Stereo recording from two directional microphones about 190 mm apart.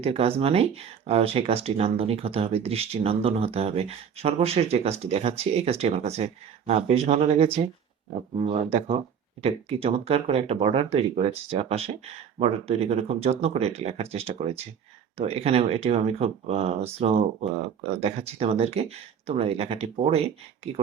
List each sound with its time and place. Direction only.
0.0 s speech: 30° right (ahead or behind)